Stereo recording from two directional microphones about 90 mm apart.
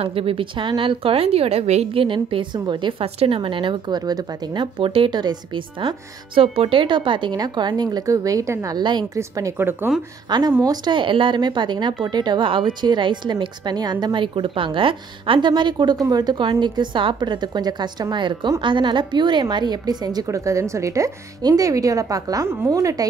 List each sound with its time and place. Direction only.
0.0 s speech: 90° right; by 4.0 s 65° right (ahead or behind)
4.7 s speech: 80° right
5.8 s speech: 70° right (ahead or behind); by 8.8 s 40° right (ahead or behind)
9.9 s speech: 5° right (ahead or behind)
10.3 s a woman's voice: 55° right (ahead or behind)
10.9 s a woman's voice: 65° right (ahead or behind); by 20.2 s 50° right (ahead or behind)
20.2 s speech: 35° right (ahead or behind)